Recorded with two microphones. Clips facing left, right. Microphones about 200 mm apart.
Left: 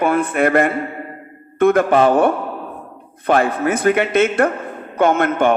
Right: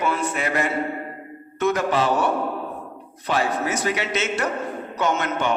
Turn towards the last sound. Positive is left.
turn(degrees=55)  # may be behind; listen again after turning